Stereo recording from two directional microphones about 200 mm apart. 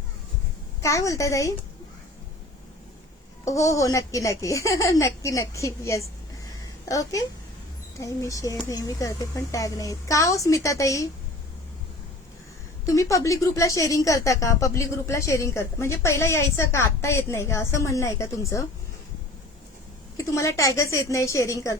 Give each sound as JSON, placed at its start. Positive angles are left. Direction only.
{"t": 0.8, "sound": "a woman's voice", "side_deg": 15}
{"t": 3.5, "sound": "a woman's voice", "side_deg": 15}
{"t": 12.8, "sound": "a woman's voice", "side_deg": 15}
{"t": 20.1, "sound": "a woman's voice", "side_deg": 15}